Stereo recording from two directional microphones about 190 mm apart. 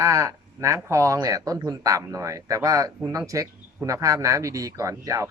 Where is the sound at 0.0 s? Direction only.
15° right (ahead or behind).